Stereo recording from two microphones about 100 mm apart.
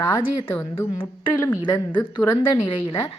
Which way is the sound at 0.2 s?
60° left (ahead or behind).